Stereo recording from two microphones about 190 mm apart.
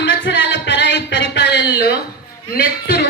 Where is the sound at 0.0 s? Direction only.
75° left (ahead or behind).